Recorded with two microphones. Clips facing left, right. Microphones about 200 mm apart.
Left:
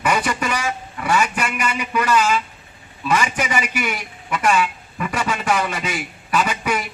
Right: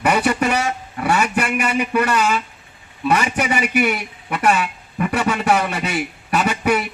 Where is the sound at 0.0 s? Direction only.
60° right (ahead or behind).